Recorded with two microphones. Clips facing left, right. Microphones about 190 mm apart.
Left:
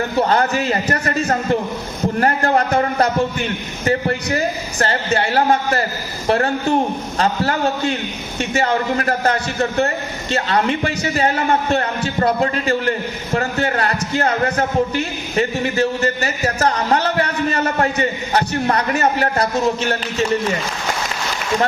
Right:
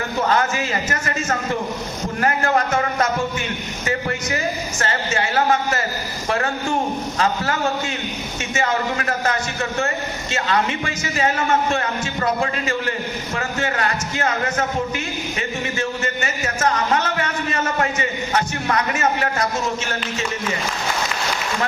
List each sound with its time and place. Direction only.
0.2 s a man's voice: 35° left (ahead or behind)
2.2 s a man's voice: 35° left (ahead or behind)